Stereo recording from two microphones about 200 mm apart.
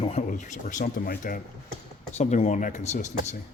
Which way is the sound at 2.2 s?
35° left (ahead or behind).